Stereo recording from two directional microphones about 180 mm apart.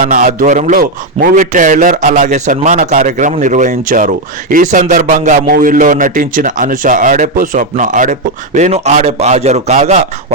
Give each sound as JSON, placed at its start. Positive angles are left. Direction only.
{"t": 0.0, "sound": "a man's voice", "side_deg": -50}